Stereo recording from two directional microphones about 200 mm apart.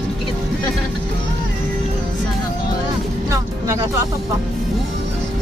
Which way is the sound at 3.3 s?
15° right (ahead or behind).